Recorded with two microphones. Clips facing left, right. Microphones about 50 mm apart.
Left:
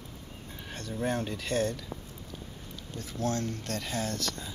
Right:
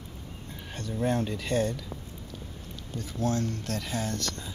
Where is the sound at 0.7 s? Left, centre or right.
Centre.